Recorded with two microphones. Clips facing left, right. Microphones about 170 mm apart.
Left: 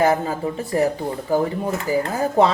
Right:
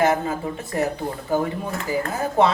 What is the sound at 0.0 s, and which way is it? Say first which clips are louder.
Speech: left 2 dB; 35° left (ahead or behind).